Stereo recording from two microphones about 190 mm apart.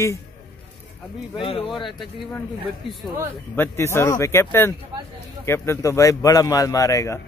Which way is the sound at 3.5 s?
10° left (ahead or behind).